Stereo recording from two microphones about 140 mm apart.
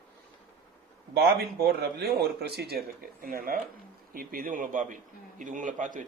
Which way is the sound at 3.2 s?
90° right.